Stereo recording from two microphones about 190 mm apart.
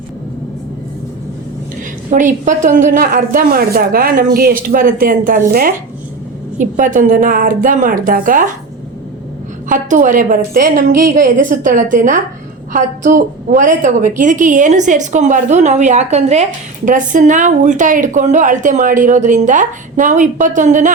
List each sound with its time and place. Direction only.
2.0 s a woman's voice: 40° right (ahead or behind)
9.6 s a woman's voice: 45° right (ahead or behind)